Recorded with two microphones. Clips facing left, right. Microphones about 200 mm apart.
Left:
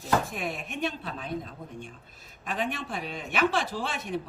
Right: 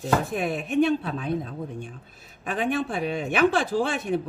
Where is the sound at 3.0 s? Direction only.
55° right (ahead or behind).